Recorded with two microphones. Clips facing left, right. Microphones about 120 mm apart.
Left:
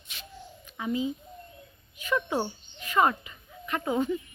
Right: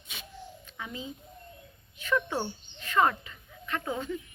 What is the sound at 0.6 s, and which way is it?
A child's voice, 15° left (ahead or behind).